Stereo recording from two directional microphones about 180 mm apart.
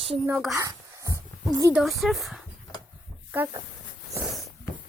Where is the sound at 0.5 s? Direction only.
15° right (ahead or behind).